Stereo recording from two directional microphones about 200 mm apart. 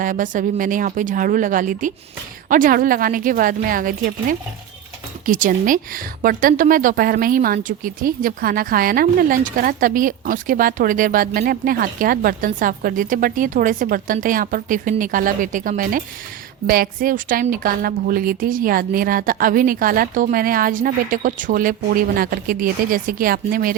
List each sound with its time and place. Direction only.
0.0 s a woman's voice: 40° right (ahead or behind)